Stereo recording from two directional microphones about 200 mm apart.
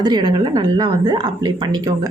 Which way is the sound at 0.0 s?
20° right (ahead or behind).